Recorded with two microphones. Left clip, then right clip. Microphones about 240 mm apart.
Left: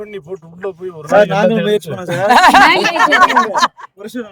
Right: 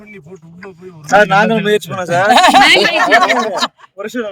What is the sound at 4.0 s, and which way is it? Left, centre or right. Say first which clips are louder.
Speech: right 6 dB; centre.